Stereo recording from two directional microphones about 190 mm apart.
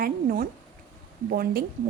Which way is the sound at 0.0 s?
45° right (ahead or behind).